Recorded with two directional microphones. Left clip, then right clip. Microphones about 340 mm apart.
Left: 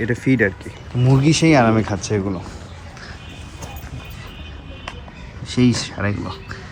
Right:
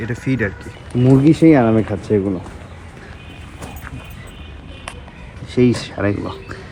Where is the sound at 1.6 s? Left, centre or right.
Right.